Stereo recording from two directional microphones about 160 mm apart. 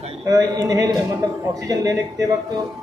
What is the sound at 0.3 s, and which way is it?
A man's voice, 20° right (ahead or behind).